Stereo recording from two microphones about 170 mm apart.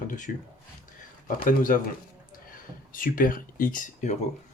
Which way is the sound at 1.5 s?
50° left (ahead or behind).